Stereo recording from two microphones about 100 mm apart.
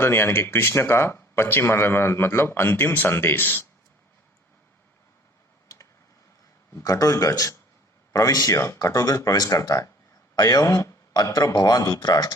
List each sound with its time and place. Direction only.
0.0 s speech: 25° left (ahead or behind)
5.6 s computer keyboard: 30° left (ahead or behind)
6.7 s a man's voice: 30° left (ahead or behind)